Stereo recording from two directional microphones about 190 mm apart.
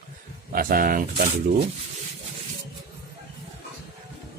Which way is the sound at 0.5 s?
50° right (ahead or behind).